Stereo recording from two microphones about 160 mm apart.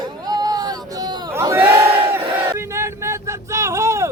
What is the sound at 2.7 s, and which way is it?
Vehicle, 15° right (ahead or behind).